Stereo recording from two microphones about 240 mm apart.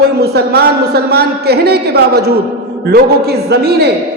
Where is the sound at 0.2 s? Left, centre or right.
Right.